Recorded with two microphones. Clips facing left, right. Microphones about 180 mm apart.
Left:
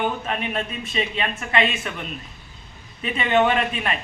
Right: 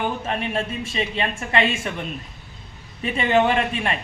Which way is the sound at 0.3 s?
30° right (ahead or behind).